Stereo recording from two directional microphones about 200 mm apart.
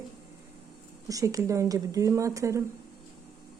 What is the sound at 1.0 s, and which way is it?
A woman's voice, 15° right (ahead or behind).